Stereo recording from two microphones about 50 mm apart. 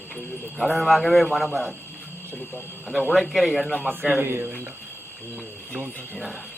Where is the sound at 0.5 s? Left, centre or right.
Centre.